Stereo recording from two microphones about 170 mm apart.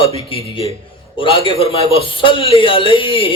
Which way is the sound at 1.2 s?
30° left (ahead or behind).